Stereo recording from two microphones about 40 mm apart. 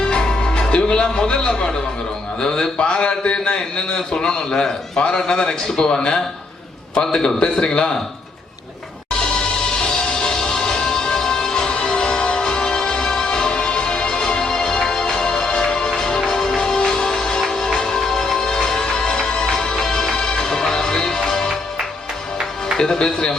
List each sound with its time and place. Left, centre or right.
0.0 s music: centre
1.3 s a man's voice: left
9.8 s music: centre
22.8 s speech: centre